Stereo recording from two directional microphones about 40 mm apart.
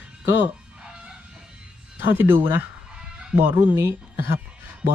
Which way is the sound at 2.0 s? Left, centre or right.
Right.